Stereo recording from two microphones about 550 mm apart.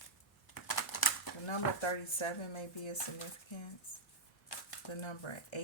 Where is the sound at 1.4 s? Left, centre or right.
Left.